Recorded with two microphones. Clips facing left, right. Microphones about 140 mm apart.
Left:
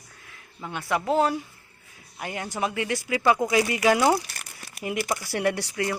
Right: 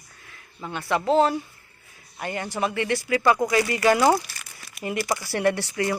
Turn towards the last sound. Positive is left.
turn(degrees=5)  # may be behind; listen again after turning